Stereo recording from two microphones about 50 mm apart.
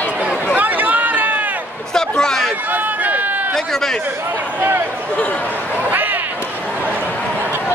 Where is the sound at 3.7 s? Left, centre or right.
Centre.